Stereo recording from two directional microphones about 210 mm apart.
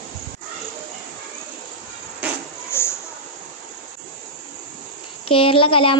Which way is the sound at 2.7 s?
10° left (ahead or behind).